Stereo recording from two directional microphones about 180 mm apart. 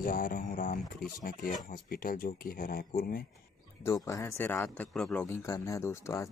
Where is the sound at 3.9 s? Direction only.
15° left (ahead or behind).